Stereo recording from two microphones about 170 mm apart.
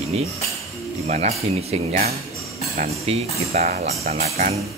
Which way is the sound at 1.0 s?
40° right (ahead or behind).